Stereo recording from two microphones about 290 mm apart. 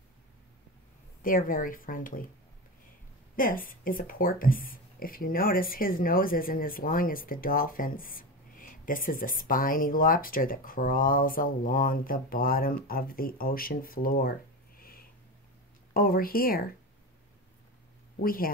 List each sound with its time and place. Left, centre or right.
1.2 s speech: left
3.3 s speech: left
14.8 s a sound: left
15.9 s speech: left
18.2 s speech: left